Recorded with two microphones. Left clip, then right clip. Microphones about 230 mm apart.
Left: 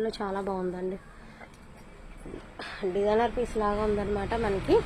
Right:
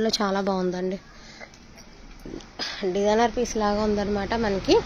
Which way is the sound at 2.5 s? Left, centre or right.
Right.